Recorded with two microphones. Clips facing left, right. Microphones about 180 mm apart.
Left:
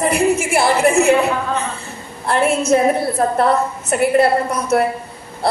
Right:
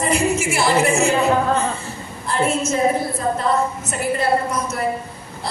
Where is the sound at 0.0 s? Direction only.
60° left (ahead or behind).